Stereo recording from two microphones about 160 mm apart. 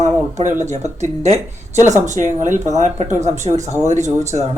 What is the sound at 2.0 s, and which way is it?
Speech, 50° right (ahead or behind).